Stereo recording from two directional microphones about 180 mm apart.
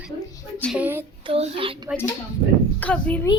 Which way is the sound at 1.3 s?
30° right (ahead or behind).